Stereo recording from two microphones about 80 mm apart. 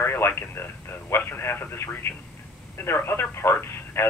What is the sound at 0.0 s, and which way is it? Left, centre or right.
Speech, left.